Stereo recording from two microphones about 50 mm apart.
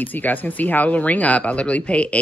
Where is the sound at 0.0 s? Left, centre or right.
Left.